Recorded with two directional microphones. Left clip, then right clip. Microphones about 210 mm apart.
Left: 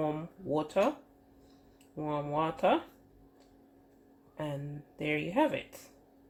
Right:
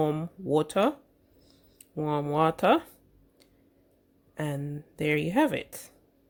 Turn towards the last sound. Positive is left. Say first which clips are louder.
# right 4 dB
turn(degrees=-50)  # may be behind; listen again after turning